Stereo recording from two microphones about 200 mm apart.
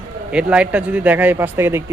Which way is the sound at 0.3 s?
5° right (ahead or behind).